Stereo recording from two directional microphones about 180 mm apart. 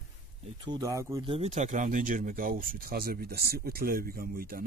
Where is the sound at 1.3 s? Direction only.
35° right (ahead or behind); by 4.6 s 55° right (ahead or behind).